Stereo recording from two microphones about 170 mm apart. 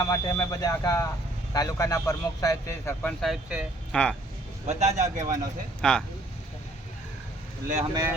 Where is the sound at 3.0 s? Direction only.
5° left (ahead or behind).